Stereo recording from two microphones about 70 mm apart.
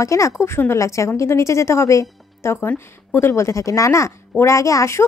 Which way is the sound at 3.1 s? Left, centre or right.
Left.